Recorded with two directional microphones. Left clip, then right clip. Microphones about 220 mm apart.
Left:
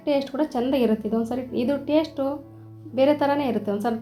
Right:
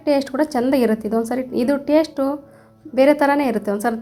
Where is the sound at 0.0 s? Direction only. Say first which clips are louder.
Right 5 dB; 35° right (ahead or behind).